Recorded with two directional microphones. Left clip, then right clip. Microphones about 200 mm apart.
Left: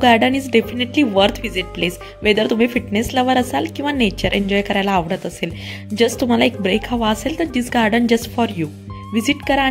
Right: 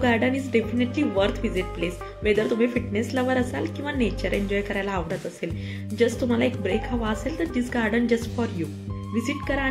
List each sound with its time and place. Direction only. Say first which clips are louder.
0.0 s speech: left 9 dB; 50° left (ahead or behind)